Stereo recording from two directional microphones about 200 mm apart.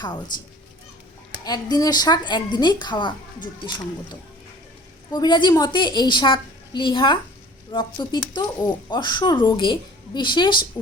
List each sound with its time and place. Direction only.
0.0 s a woman's voice: 20° left (ahead or behind)
1.5 s a woman's voice: 20° left (ahead or behind)
5.1 s a woman's voice: 20° left (ahead or behind)